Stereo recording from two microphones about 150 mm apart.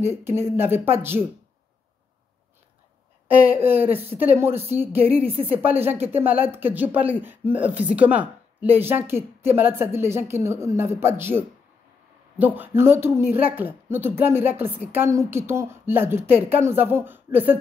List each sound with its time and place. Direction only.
0.0 s speech: 15° right (ahead or behind)
3.4 s speech: 15° right (ahead or behind)